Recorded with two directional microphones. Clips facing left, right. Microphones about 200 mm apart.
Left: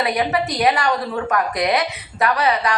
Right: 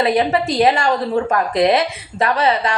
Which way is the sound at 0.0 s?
25° right (ahead or behind).